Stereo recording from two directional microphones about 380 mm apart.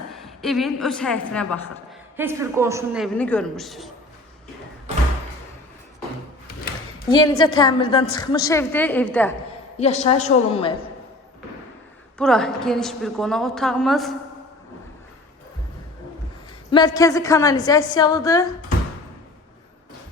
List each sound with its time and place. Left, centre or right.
0.4 s a woman's voice: centre
7.1 s a woman's voice: centre
9.7 s a woman's voice: centre
12.1 s a woman's voice: centre
16.7 s a woman's voice: centre